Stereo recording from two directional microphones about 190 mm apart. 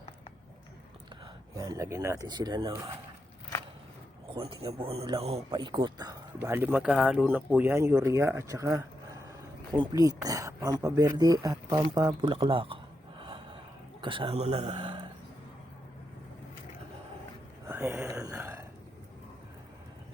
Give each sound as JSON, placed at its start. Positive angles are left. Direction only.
{"t": 1.5, "sound": "speech", "side_deg": -15}
{"t": 4.4, "sound": "a man's voice", "side_deg": -25}
{"t": 17.7, "sound": "a sound", "side_deg": -10}